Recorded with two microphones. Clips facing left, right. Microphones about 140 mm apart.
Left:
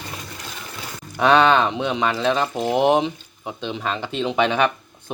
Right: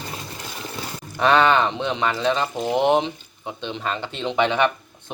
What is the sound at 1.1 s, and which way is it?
Speech, 15° left (ahead or behind).